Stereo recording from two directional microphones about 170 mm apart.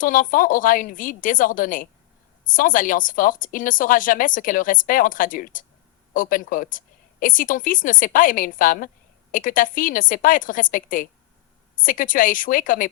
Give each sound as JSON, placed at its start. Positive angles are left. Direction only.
{"t": 0.0, "sound": "a woman's voice", "side_deg": 55}